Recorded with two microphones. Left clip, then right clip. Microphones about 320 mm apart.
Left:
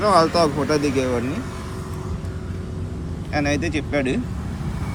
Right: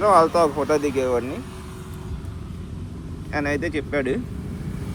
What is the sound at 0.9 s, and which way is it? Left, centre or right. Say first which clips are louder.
Speech: even; left.